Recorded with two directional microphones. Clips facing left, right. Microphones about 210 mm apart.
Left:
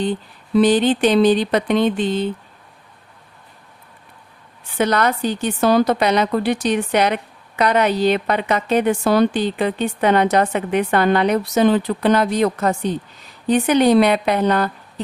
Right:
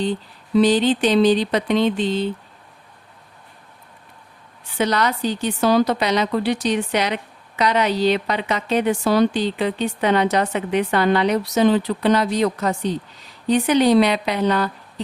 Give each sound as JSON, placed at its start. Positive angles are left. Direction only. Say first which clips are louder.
{"t": 0.5, "sound": "a woman's voice", "louder": "left 1 dB", "side_deg": 55}
{"t": 4.8, "sound": "a woman's voice", "louder": "left 2 dB", "side_deg": 50}